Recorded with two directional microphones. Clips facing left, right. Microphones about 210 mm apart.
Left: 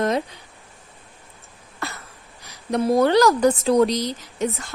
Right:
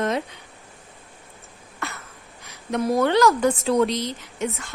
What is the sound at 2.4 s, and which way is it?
A woman's voice, 35° left (ahead or behind).